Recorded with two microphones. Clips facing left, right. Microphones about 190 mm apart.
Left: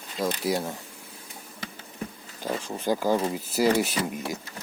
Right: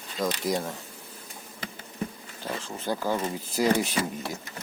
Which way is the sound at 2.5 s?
15° left (ahead or behind).